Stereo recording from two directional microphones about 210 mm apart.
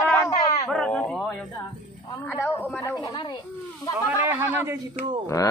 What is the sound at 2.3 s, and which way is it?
Speech, 10° left (ahead or behind).